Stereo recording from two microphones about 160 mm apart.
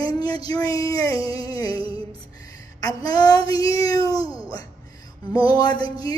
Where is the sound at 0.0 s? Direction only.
25° left (ahead or behind).